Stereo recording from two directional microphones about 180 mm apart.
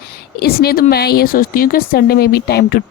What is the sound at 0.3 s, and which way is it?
A woman's voice, 60° left (ahead or behind).